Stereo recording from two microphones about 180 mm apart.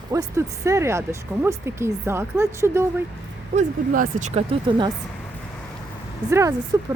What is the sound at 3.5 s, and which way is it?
Speech, 45° right (ahead or behind).